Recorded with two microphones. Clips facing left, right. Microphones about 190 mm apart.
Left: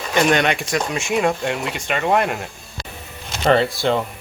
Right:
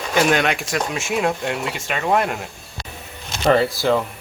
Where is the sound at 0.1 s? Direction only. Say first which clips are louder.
Left 1 dB; centre (ahead or behind).